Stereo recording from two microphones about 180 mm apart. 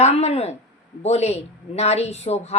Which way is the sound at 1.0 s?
35° left (ahead or behind).